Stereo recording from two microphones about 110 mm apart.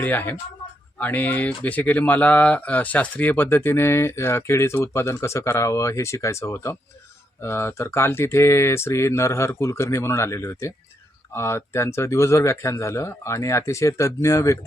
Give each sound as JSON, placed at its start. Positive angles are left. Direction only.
{"t": 0.0, "sound": "speech", "side_deg": 15}